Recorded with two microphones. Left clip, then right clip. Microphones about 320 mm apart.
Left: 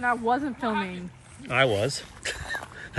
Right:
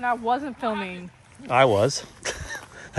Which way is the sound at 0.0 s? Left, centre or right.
Right.